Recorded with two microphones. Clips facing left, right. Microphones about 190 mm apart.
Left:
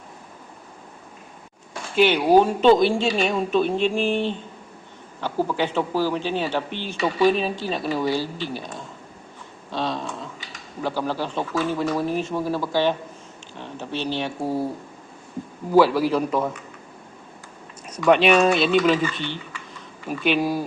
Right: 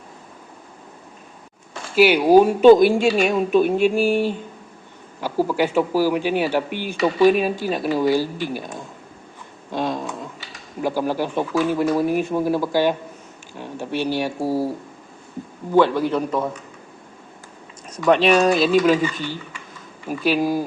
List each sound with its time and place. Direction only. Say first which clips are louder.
2.0 s speech: right 3 dB; 10° right (ahead or behind)
9.7 s a sound: right 3 dB; 10° right (ahead or behind)
10.8 s speech: right 4 dB; 15° right (ahead or behind)
15.7 s speech: even; 5° left (ahead or behind)
18.2 s speech: right 1 dB; centre (ahead or behind)
19.1 s speech: right 2 dB; 40° right (ahead or behind)
20.1 s speech: right 2 dB; 5° right (ahead or behind)